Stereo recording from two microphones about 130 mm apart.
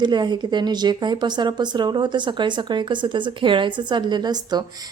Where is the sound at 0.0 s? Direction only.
35° right (ahead or behind).